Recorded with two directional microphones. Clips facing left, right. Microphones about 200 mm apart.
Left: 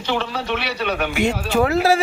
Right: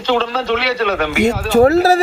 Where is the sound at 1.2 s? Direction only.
45° right (ahead or behind).